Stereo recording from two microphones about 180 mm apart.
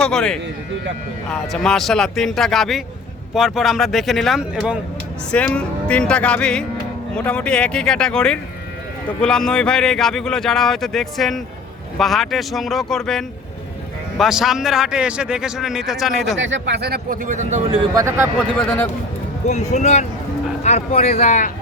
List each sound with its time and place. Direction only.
0.0 s speech: 5° left (ahead or behind)
5.3 s speech: 5° left (ahead or behind)
16.4 s speech: 80° right; by 17.6 s 45° right (ahead or behind)
17.7 s speech: 25° right (ahead or behind)
18.5 s speech: 5° left (ahead or behind)
19.5 s speech: 40° left (ahead or behind)